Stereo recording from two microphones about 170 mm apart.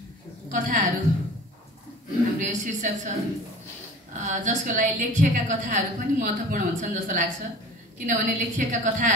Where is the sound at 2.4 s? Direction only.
50° right (ahead or behind).